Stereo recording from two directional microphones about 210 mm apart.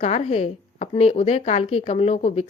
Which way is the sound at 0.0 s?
30° left (ahead or behind).